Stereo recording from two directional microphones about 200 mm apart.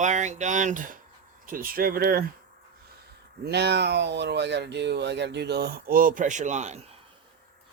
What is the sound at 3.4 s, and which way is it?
Speech, 55° right (ahead or behind).